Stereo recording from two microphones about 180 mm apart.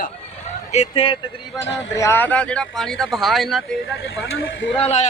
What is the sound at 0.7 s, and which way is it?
Speech, 35° left (ahead or behind).